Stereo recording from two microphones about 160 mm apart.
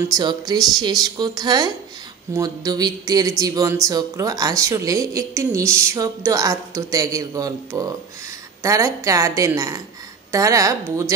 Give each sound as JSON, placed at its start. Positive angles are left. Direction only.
{"t": 0.1, "sound": "a woman's voice", "side_deg": -25}